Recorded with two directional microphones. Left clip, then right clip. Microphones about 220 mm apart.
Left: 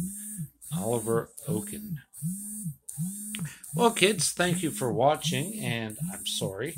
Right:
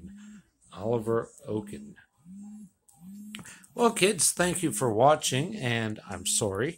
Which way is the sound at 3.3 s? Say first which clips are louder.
Left 4 dB; 5° right (ahead or behind).